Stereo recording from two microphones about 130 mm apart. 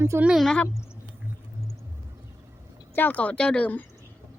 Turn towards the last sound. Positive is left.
turn(degrees=10)  # may be behind; listen again after turning